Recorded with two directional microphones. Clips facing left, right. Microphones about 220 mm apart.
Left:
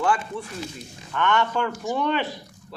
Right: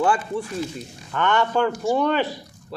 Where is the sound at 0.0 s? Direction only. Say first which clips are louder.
Right 3 dB; 30° right (ahead or behind).